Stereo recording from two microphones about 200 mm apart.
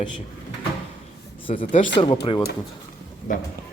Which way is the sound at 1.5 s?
35° left (ahead or behind).